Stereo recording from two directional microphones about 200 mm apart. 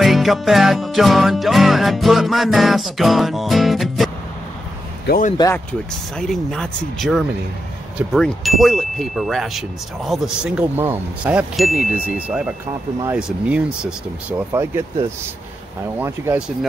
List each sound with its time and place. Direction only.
0.0 s chime: centre (ahead or behind)
5.0 s speech: 45° left (ahead or behind)
5.4 s chime: 10° left (ahead or behind)
14.5 s speech: 15° right (ahead or behind)
16.0 s speech: 5° right (ahead or behind)